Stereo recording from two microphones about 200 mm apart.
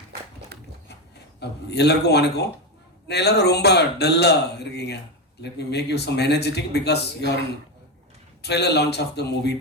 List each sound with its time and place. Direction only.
0.5 s a sound: 55° right (ahead or behind)
1.4 s speech: 55° left (ahead or behind)
8.4 s speech: 55° left (ahead or behind)